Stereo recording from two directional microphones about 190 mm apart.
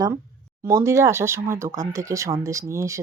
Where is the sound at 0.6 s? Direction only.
15° right (ahead or behind).